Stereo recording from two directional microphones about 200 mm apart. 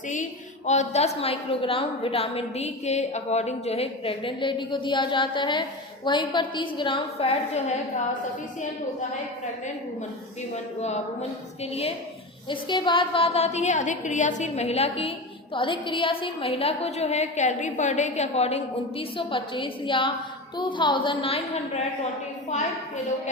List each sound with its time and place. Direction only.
0.1 s a woman's voice: 35° left (ahead or behind)
10.5 s a woman's voice: 35° left (ahead or behind)